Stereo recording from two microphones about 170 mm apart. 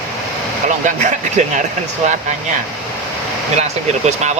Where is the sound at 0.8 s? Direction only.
50° right (ahead or behind).